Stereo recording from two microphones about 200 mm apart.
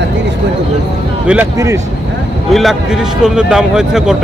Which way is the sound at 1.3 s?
10° right (ahead or behind).